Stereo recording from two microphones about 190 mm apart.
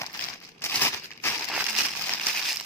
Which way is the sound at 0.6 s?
15° left (ahead or behind).